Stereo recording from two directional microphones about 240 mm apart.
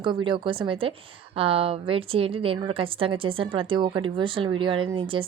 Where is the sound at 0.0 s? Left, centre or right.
Centre.